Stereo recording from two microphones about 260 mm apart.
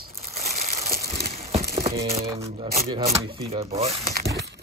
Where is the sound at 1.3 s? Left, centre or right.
Right.